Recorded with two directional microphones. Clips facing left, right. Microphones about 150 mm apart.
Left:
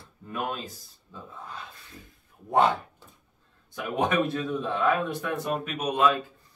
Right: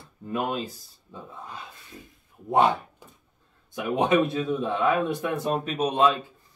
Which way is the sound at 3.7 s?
20° right (ahead or behind).